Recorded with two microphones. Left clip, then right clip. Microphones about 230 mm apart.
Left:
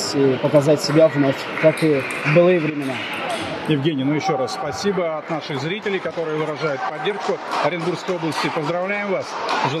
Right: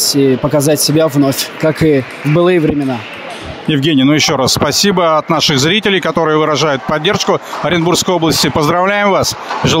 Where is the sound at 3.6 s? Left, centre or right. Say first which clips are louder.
Right 11 dB; right.